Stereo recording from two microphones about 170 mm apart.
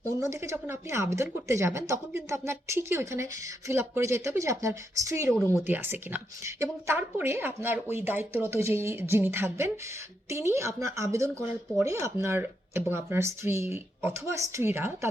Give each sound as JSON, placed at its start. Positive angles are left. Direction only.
{"t": 0.0, "sound": "speech", "side_deg": -20}